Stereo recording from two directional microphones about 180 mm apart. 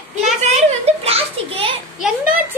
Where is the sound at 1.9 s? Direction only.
5° right (ahead or behind).